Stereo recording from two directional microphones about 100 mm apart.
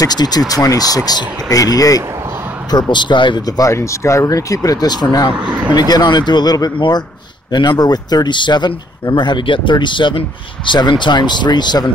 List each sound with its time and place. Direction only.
0.0 s speech: 40° left (ahead or behind)
2.7 s speech: 50° left (ahead or behind)
5.5 s speech: 15° right (ahead or behind)
5.8 s speech: 40° left (ahead or behind)